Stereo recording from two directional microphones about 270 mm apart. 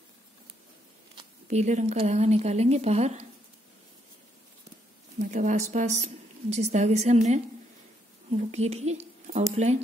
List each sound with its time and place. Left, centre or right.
1.1 s speech: right
5.2 s a woman's voice: right